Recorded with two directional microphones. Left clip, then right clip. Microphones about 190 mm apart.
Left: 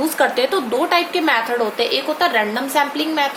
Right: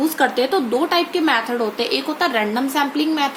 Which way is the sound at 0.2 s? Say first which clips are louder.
Left 2 dB; 10° right (ahead or behind).